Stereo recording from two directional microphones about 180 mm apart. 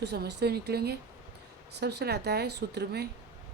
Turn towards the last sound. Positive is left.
turn(degrees=-65)  # may be behind; listen again after turning